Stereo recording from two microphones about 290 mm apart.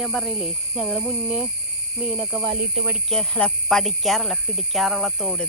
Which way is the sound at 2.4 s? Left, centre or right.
Right.